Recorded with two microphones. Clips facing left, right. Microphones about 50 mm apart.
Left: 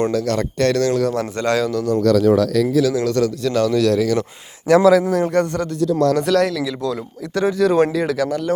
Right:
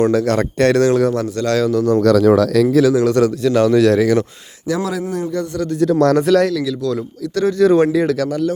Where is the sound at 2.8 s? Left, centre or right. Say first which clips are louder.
Right 4 dB; right.